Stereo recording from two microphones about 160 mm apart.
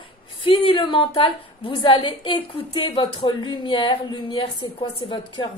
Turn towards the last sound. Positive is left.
turn(degrees=30)  # may be behind; listen again after turning